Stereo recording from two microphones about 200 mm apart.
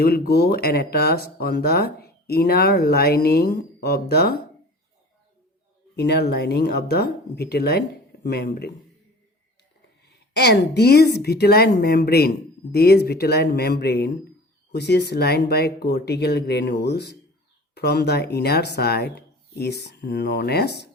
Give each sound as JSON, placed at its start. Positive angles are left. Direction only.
{"t": 0.0, "sound": "speech", "side_deg": 50}
{"t": 6.0, "sound": "speech", "side_deg": 55}
{"t": 10.1, "sound": "speech", "side_deg": 55}